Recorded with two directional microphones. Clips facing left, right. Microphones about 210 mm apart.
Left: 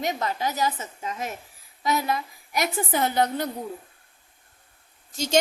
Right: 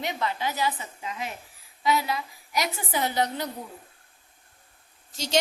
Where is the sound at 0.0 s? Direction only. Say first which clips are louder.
Left 2 dB; 40° left (ahead or behind).